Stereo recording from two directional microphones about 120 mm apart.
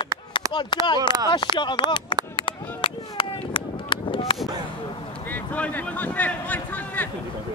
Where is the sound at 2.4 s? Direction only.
45° left (ahead or behind).